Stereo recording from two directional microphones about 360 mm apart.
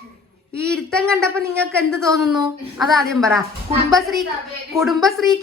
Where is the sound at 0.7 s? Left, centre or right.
Centre.